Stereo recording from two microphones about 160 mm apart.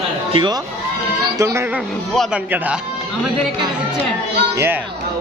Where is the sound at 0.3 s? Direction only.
30° right (ahead or behind).